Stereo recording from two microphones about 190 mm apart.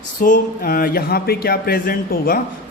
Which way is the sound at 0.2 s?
50° left (ahead or behind).